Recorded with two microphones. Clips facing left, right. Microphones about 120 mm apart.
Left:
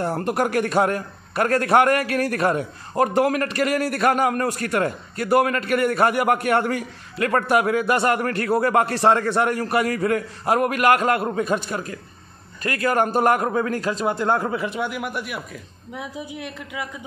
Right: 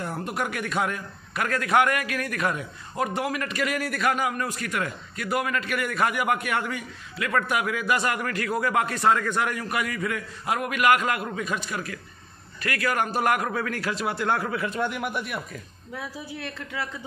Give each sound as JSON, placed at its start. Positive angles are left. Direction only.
{"t": 0.2, "sound": "a man's voice", "side_deg": 45}
{"t": 14.3, "sound": "speech", "side_deg": 20}
{"t": 14.8, "sound": "speech", "side_deg": 0}
{"t": 15.9, "sound": "a woman's voice", "side_deg": 20}